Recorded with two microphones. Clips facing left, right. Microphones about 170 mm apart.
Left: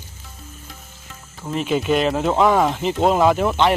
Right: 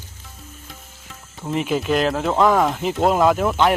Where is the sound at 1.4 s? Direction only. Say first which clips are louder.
Right 1 dB; 20° right (ahead or behind).